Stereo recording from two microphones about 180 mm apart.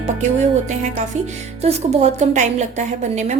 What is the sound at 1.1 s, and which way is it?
A woman's voice, 40° right (ahead or behind).